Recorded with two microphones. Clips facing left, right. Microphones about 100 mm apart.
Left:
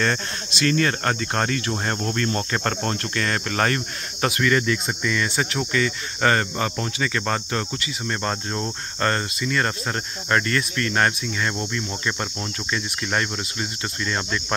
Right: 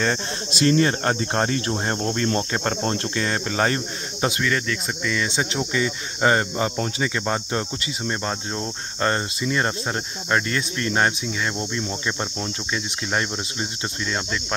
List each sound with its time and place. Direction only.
0.5 s cricket: 30° right (ahead or behind)
4.4 s speech: centre (ahead or behind)
5.3 s cricket: 20° right (ahead or behind)
8.1 s cricket: 5° right (ahead or behind)
14.0 s speech: 5° right (ahead or behind)